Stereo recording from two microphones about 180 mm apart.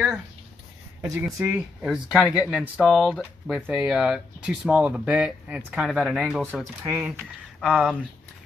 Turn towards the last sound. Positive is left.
turn(degrees=-5)  # may be behind; listen again after turning